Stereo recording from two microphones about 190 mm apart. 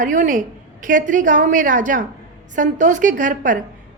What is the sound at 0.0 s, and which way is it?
A woman's voice, 45° right (ahead or behind).